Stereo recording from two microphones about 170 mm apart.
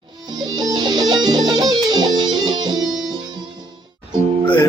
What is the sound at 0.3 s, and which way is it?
Music, 25° right (ahead or behind).